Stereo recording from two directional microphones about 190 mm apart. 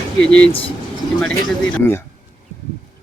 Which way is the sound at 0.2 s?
5° left (ahead or behind).